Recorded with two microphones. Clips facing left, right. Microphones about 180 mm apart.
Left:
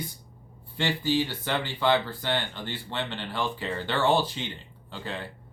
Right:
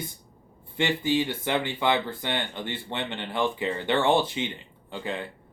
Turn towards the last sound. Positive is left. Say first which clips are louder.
# right 3 dB
turn(degrees=-20)  # may be behind; listen again after turning